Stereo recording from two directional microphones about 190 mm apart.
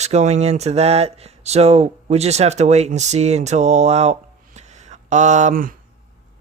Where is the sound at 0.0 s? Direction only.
35° right (ahead or behind).